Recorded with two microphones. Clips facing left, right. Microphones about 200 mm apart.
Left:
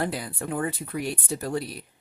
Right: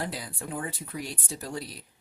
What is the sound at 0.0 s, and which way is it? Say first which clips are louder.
Speech: left 6 dB; 60° left (ahead or behind).